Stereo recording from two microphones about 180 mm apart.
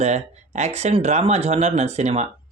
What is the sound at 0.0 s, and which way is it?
Speech, 40° right (ahead or behind).